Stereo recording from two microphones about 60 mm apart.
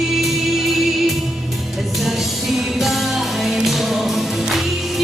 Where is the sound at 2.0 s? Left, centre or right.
Centre.